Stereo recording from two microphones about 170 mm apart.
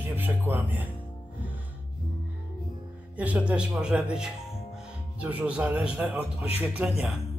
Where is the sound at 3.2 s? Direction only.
5° right (ahead or behind).